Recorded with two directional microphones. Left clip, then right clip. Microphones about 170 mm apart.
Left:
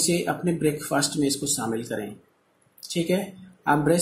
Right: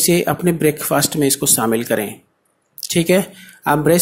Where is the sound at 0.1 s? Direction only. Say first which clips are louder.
Right 9 dB; 35° right (ahead or behind).